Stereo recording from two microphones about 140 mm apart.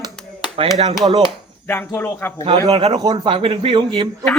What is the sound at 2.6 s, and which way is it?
Speech, 45° right (ahead or behind).